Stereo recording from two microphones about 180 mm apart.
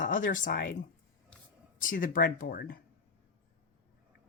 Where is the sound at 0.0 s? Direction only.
45° left (ahead or behind).